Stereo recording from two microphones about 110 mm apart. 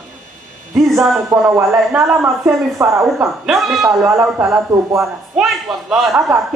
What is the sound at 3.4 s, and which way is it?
Speech, centre (ahead or behind).